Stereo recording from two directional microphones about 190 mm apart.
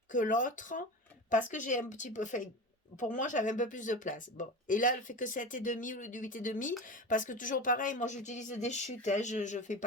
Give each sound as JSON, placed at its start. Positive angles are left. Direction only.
{"t": 0.1, "sound": "speech", "side_deg": 40}